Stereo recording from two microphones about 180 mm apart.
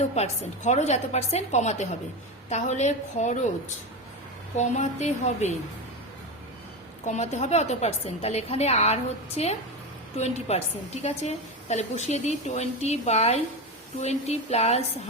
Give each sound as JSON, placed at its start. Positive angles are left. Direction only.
{"t": 0.0, "sound": "a woman's voice", "side_deg": 40}
{"t": 4.5, "sound": "a woman's voice", "side_deg": 40}
{"t": 7.0, "sound": "a woman's voice", "side_deg": 40}